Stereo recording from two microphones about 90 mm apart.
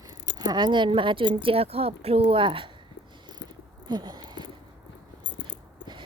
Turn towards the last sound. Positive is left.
turn(degrees=-55)  # may be behind; listen again after turning